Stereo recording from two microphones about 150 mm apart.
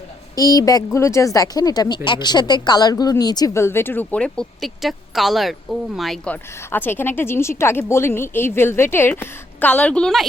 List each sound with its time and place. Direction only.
0.3 s speech: 25° left (ahead or behind); by 6.3 s centre (ahead or behind)
6.3 s speech: 15° left (ahead or behind)